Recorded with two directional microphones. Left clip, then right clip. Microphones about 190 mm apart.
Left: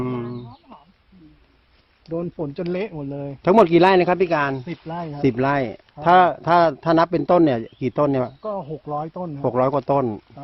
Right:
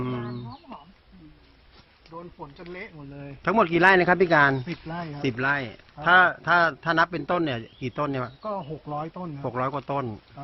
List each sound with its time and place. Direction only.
0.0 s wild animals: 15° left (ahead or behind)
2.4 s speech: 60° left (ahead or behind)
3.4 s speech: 25° left (ahead or behind); by 4.6 s 10° left (ahead or behind)
4.9 s speech: 30° left (ahead or behind)